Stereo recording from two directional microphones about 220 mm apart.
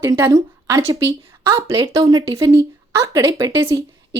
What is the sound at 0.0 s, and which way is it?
Speech, 15° right (ahead or behind).